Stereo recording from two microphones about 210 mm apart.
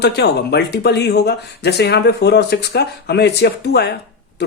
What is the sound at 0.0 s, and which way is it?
Speech, 50° left (ahead or behind).